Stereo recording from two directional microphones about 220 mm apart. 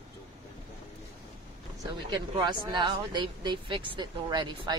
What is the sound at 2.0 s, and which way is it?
Speech, 20° right (ahead or behind).